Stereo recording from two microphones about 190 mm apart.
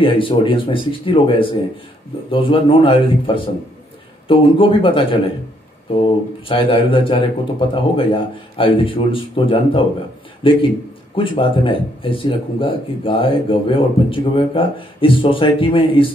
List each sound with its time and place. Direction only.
0.0 s speech: 25° left (ahead or behind)
6.4 s speech: 30° left (ahead or behind)
11.1 s speech: 25° left (ahead or behind)